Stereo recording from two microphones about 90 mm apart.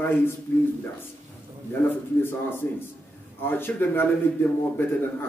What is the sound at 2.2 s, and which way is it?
A man's voice, 25° left (ahead or behind).